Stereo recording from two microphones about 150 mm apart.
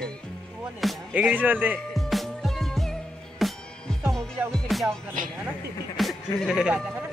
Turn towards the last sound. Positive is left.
turn(degrees=-5)  # may be behind; listen again after turning